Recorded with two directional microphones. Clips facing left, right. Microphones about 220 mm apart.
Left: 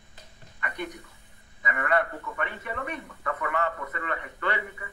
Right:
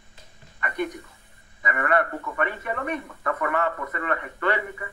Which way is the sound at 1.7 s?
55° right (ahead or behind).